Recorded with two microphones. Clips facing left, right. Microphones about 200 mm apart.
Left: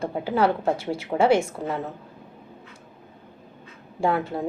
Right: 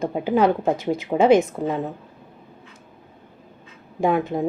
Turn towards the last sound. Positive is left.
turn(degrees=-15)  # may be behind; listen again after turning